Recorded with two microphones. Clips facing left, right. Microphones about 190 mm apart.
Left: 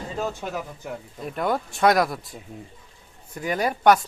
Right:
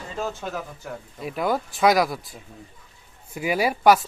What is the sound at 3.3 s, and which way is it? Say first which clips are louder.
Speech: right 2 dB; 5° right (ahead or behind).